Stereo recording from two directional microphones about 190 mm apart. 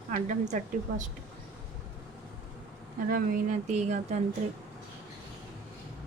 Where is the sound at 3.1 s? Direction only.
50° right (ahead or behind).